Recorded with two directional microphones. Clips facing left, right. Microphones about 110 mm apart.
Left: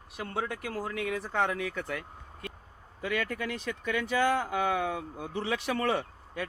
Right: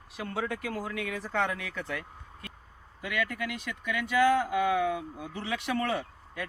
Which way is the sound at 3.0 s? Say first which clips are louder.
Left 1 dB; 30° left (ahead or behind).